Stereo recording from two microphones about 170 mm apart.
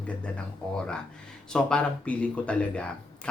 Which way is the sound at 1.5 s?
5° left (ahead or behind).